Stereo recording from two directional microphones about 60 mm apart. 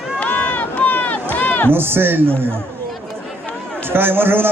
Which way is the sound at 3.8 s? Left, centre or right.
Right.